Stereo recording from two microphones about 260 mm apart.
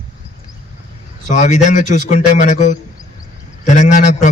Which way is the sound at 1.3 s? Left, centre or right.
Left.